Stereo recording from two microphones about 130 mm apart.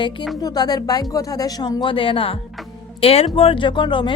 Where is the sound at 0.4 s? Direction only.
30° left (ahead or behind).